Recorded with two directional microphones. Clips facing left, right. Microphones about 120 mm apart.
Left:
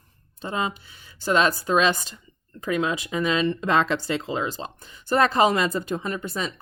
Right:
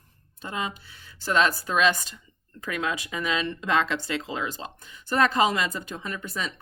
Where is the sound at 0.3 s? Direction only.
30° left (ahead or behind).